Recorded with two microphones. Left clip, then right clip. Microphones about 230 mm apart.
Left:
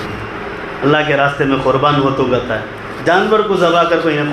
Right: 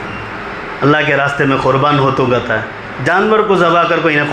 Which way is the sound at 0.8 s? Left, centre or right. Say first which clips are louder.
Right 1 dB; right.